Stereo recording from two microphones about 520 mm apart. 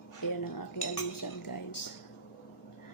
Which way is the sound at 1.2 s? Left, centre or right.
Left.